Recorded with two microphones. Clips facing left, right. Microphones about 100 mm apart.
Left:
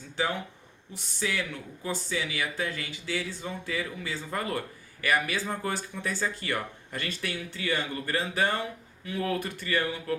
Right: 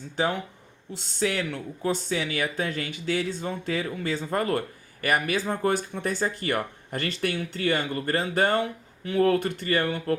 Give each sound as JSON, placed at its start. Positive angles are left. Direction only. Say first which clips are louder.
{"t": 0.9, "sound": "speech", "louder": "right 5 dB", "side_deg": -65}
{"t": 1.8, "sound": "speech", "louder": "right 5 dB", "side_deg": -55}